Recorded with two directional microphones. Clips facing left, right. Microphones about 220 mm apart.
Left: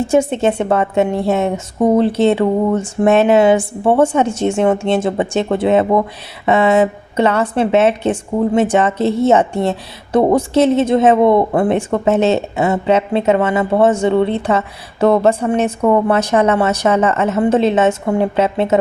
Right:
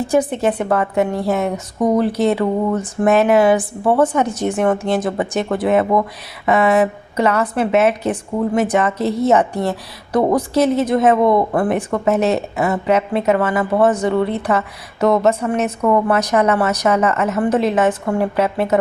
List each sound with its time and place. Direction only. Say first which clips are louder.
0.0 s a woman's voice: left 3 dB; 25° left (ahead or behind)